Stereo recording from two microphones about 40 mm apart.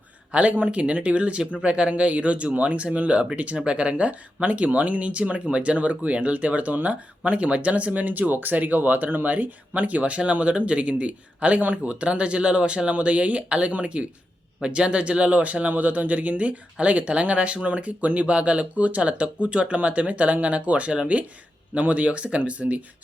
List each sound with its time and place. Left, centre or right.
0.3 s speech: right